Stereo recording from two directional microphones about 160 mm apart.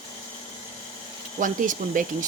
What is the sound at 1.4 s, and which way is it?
Speech, 55° right (ahead or behind).